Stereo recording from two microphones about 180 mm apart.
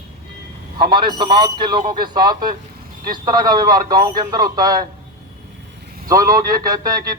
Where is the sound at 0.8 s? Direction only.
25° right (ahead or behind).